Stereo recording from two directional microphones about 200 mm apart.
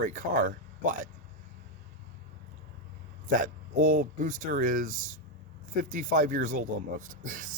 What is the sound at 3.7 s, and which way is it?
Speech, 45° right (ahead or behind).